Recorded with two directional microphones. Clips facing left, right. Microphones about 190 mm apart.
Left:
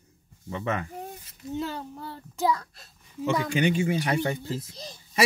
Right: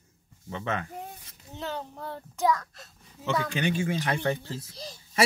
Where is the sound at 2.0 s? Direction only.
10° left (ahead or behind).